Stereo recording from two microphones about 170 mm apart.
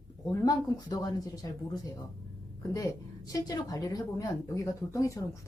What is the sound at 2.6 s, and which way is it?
A woman's voice, 20° left (ahead or behind).